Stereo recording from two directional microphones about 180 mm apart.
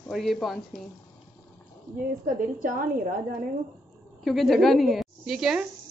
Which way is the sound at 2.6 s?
45° right (ahead or behind).